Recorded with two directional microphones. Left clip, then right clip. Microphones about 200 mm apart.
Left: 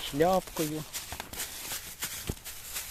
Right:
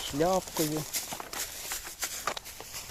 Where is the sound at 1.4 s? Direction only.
Centre (ahead or behind).